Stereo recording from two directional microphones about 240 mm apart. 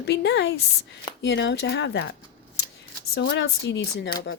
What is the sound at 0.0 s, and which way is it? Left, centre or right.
Speech, left.